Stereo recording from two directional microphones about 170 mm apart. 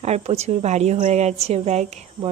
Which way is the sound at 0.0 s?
40° right (ahead or behind).